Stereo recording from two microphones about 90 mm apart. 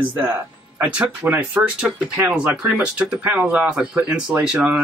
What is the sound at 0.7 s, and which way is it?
Speech, 15° right (ahead or behind).